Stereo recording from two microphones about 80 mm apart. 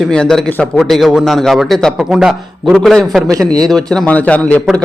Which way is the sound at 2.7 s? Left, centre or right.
Centre.